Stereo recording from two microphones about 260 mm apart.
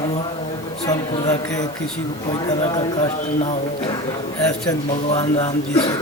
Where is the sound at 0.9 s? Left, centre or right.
Centre.